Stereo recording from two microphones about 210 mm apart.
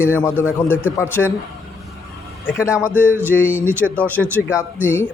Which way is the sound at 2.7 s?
15° left (ahead or behind).